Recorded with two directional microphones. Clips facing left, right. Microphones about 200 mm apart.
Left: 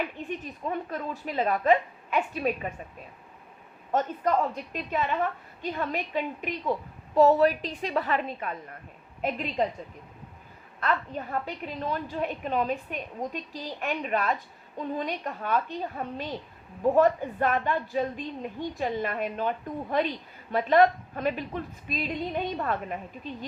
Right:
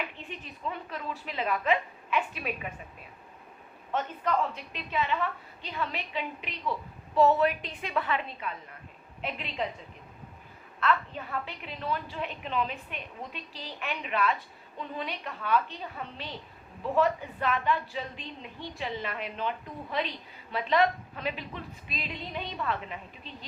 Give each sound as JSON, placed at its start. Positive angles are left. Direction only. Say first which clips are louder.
{"t": 0.3, "sound": "a woman's voice", "louder": "left 5 dB", "side_deg": 45}
{"t": 3.9, "sound": "a woman's voice", "louder": "left 4 dB", "side_deg": 40}
{"t": 10.8, "sound": "a woman's voice", "louder": "even", "side_deg": 40}